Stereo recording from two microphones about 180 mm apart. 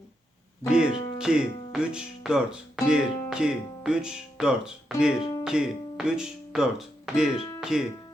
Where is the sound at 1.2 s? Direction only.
5° right (ahead or behind).